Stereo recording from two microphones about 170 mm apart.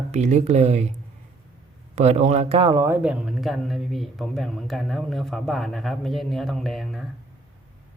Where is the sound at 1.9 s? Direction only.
40° right (ahead or behind).